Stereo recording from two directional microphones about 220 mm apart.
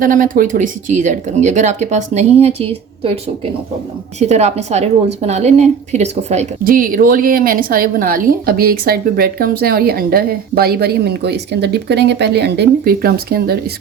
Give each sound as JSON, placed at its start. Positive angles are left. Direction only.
{"t": 0.0, "sound": "speech", "side_deg": -40}
{"t": 4.2, "sound": "a woman's voice", "side_deg": -30}